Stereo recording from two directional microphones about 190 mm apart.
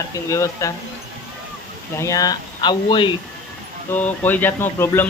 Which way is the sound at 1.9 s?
15° left (ahead or behind).